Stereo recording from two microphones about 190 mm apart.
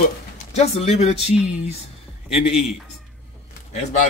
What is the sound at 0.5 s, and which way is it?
Speech, 35° left (ahead or behind).